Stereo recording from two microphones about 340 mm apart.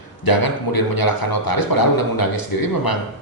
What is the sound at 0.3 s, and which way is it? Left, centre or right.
A man's voice, left.